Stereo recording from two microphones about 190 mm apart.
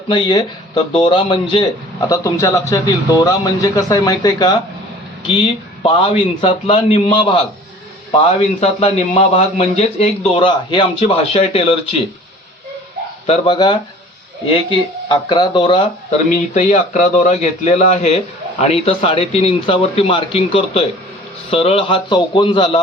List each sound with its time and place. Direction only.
0.1 s a man's voice: 25° left (ahead or behind)
5.8 s a man's voice: 25° left (ahead or behind)
8.4 s speech: 35° left (ahead or behind)
13.2 s a man's voice: 30° left (ahead or behind)